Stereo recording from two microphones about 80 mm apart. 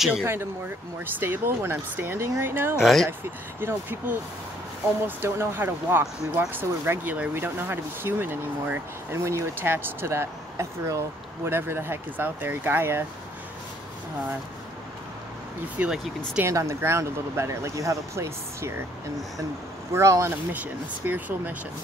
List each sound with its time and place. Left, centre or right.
0.2 s speech: right
2.8 s speech: centre
3.6 s speech: right
15.8 s speech: centre
16.4 s speech: right
19.9 s speech: right
21.0 s speech: right